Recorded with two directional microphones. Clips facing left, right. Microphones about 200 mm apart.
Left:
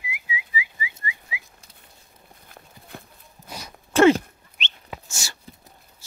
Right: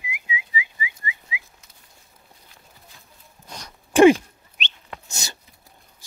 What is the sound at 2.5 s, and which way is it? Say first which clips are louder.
Walk: left 13 dB; 55° left (ahead or behind).